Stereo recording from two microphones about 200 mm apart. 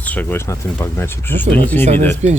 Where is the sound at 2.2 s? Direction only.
35° right (ahead or behind).